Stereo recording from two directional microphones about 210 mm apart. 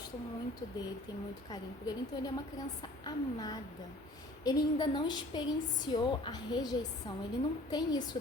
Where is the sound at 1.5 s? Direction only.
20° left (ahead or behind).